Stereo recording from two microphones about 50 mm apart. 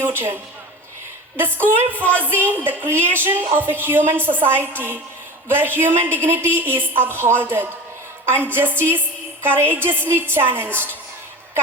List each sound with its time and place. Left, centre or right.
0.0 s a woman's voice: right
1.4 s a woman's voice: right